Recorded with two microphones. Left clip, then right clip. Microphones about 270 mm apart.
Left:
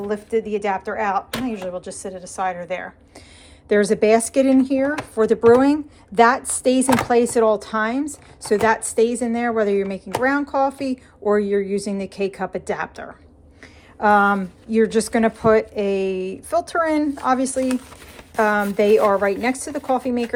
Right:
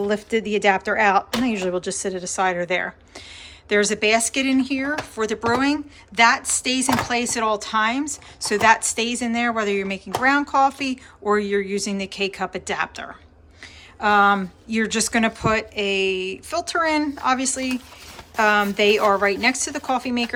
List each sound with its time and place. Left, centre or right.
0.1 s speech: centre
3.7 s a woman's voice: centre